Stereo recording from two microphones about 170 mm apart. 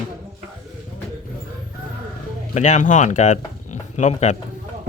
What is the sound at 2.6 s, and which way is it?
Speech, 45° left (ahead or behind).